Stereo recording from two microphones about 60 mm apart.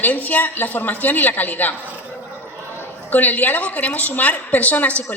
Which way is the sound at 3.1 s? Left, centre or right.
Left.